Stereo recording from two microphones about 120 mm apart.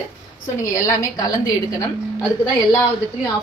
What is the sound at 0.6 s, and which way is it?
A woman's voice, 30° left (ahead or behind).